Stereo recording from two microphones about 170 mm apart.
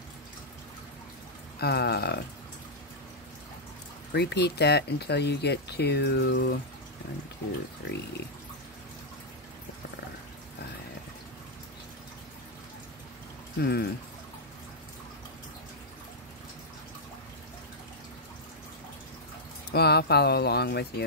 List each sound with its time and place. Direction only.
1.6 s speech: 70° left (ahead or behind)
4.1 s speech: 80° left
13.6 s speech: 70° left (ahead or behind)
19.7 s speech: 70° left (ahead or behind)